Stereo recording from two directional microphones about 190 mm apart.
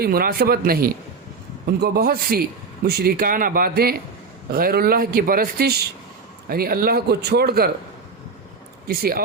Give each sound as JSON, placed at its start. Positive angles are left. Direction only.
{"t": 0.0, "sound": "a man's voice", "side_deg": -55}
{"t": 8.9, "sound": "a man's voice", "side_deg": -50}